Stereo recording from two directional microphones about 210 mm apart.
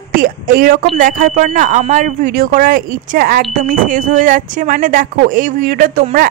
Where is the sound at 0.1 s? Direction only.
40° right (ahead or behind).